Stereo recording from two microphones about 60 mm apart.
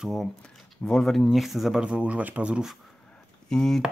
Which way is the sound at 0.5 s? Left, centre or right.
Centre.